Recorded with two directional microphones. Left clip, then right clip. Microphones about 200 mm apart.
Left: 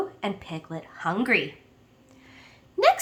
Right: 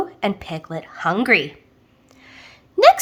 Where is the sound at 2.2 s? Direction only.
40° right (ahead or behind).